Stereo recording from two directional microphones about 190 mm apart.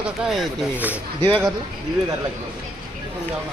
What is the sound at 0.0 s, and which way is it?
Speech, 5° right (ahead or behind).